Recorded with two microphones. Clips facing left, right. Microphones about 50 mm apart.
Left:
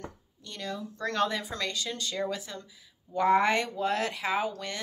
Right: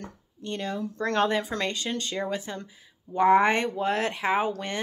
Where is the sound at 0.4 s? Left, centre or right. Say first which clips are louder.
Right 6 dB; right.